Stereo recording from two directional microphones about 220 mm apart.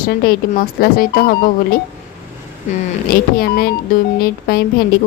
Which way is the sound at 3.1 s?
40° left (ahead or behind).